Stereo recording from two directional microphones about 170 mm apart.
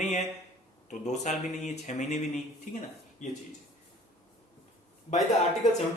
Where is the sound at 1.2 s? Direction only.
45° left (ahead or behind).